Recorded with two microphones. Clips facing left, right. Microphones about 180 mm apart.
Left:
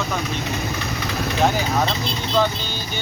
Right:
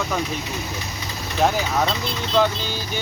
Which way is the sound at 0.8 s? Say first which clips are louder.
Left 7 dB; 65° left (ahead or behind).